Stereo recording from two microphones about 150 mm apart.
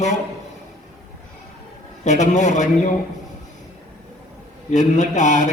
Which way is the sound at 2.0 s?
50° left (ahead or behind).